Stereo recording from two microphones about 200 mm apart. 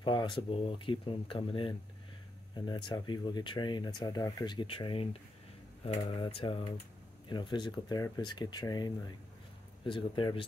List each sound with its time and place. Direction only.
0.0 s speech: 25° left (ahead or behind)